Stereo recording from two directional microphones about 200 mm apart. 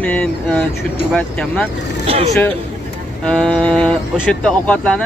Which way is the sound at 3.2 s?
5° left (ahead or behind).